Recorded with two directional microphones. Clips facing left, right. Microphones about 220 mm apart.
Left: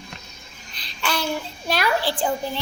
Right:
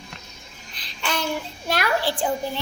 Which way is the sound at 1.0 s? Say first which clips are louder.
Left 1 dB; 20° right (ahead or behind).